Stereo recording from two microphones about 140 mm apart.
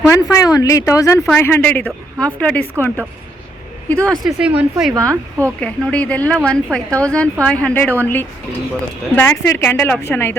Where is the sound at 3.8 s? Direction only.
10° left (ahead or behind).